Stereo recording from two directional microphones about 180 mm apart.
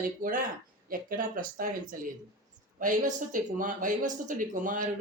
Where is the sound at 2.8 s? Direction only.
45° right (ahead or behind).